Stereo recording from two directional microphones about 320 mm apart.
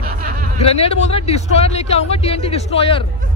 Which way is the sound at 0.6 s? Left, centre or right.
Centre.